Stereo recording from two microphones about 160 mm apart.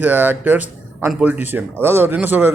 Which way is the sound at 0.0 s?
10° right (ahead or behind).